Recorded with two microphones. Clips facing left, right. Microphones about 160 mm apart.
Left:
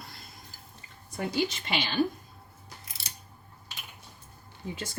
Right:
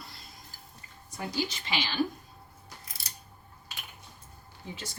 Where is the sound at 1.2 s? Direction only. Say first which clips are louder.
Left 4 dB; 55° left (ahead or behind).